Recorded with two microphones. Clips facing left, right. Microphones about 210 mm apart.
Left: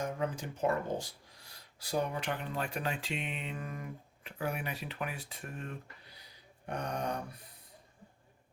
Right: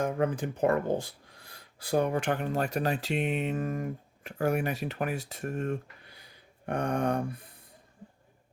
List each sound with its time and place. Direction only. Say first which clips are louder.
0.0 s speech: right 7 dB; 55° right (ahead or behind)